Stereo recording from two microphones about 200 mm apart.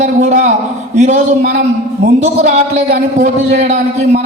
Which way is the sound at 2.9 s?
45° right (ahead or behind).